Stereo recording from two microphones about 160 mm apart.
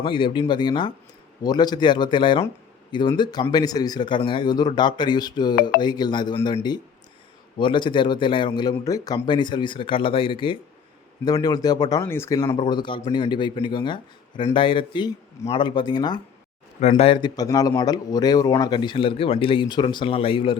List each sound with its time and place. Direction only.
0.0 s speech: 30° left (ahead or behind)